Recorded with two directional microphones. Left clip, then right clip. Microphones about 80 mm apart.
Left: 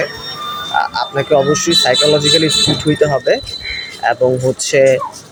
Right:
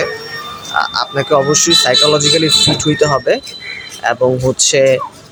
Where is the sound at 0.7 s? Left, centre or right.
Right.